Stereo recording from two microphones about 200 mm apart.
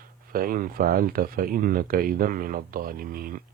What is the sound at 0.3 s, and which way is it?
Speech, 45° right (ahead or behind).